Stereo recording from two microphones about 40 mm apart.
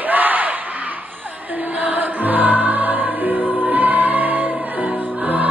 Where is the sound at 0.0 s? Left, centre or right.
Right.